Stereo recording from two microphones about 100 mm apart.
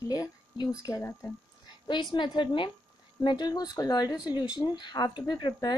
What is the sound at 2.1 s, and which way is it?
Speech, 50° left (ahead or behind).